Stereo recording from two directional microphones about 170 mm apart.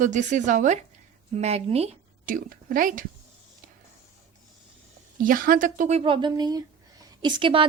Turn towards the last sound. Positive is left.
turn(degrees=-30)  # may be behind; listen again after turning